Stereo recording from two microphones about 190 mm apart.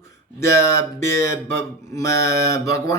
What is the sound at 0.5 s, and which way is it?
Mantra, 15° left (ahead or behind).